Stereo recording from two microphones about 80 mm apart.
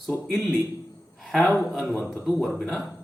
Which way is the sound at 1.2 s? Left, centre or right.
Centre.